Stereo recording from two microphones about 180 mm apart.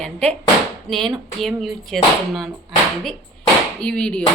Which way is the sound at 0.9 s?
Centre (ahead or behind).